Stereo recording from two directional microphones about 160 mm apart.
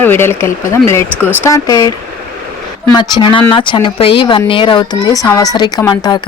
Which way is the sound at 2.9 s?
30° left (ahead or behind).